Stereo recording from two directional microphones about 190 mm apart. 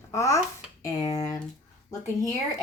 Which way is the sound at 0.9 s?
20° left (ahead or behind).